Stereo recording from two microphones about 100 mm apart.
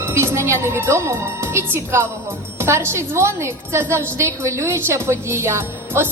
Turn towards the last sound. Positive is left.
turn(degrees=-25)  # may be behind; listen again after turning